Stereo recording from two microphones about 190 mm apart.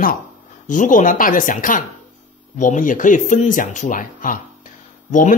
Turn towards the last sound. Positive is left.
turn(degrees=45)  # may be behind; listen again after turning